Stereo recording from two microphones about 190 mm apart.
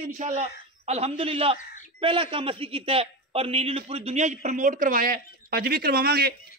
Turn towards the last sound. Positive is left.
turn(degrees=-55)  # may be behind; listen again after turning